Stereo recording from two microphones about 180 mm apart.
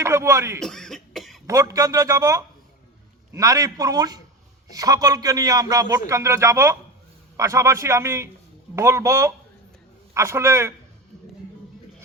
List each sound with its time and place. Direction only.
0.0 s speech: 15° right (ahead or behind)
0.6 s cough: 5° left (ahead or behind)
1.5 s a man's voice: 20° right (ahead or behind)